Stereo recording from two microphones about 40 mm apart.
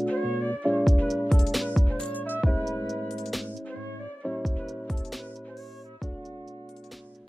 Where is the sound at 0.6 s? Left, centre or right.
Left.